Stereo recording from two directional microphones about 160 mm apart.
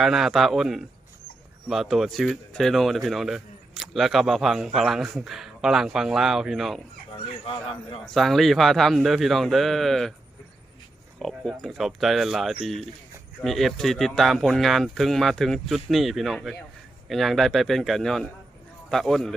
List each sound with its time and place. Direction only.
0.0 s speech: centre (ahead or behind)
7.4 s a man's voice: 35° left (ahead or behind)
8.0 s speech: centre (ahead or behind)
11.2 s speech: centre (ahead or behind)